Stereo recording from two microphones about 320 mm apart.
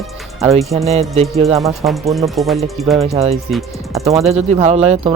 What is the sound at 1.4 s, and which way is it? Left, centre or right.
Speech, centre.